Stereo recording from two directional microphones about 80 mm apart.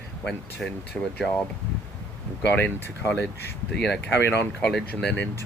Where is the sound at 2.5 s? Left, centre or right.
Left.